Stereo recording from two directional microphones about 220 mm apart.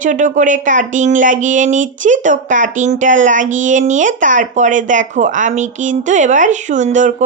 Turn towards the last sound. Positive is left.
turn(degrees=-35)  # may be behind; listen again after turning